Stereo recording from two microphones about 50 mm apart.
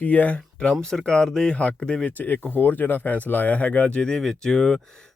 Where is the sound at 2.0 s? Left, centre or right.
Left; by 4.2 s centre.